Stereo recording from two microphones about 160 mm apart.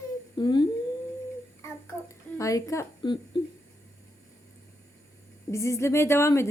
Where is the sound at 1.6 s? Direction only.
20° left (ahead or behind).